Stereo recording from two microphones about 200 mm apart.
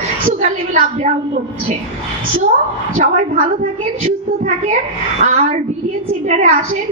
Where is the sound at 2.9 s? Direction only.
30° right (ahead or behind).